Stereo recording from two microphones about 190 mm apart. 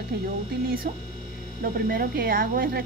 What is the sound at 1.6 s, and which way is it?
Speech, 50° right (ahead or behind).